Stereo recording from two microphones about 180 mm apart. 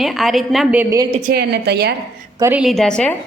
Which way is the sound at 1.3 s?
65° right (ahead or behind).